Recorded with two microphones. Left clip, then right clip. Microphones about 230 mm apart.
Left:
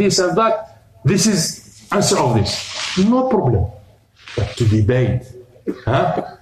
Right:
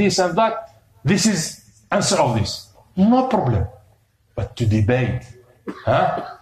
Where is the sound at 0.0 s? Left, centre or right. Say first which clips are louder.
Left 2 dB; centre.